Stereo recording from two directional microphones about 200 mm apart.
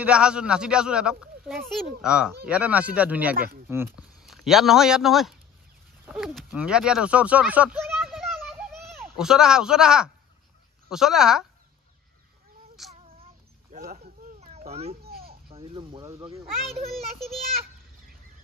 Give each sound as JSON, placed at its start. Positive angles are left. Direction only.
{"t": 0.0, "sound": "speech", "side_deg": -5}
{"t": 3.3, "sound": "speech", "side_deg": -45}
{"t": 3.6, "sound": "speech", "side_deg": -10}
{"t": 12.9, "sound": "a sound", "side_deg": -30}
{"t": 14.4, "sound": "cat", "side_deg": -30}
{"t": 15.2, "sound": "speech", "side_deg": -30}
{"t": 16.9, "sound": "speech", "side_deg": 0}